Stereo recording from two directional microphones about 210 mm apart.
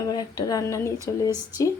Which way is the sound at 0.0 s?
20° left (ahead or behind).